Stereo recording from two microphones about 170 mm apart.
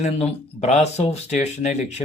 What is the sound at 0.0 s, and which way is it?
Speech, 40° left (ahead or behind).